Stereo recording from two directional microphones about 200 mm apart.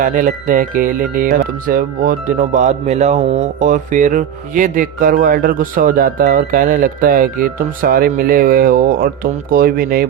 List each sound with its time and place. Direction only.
0.0 s speech: 40° right (ahead or behind)